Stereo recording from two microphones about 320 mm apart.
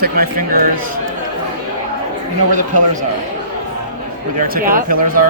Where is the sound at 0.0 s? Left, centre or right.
Right.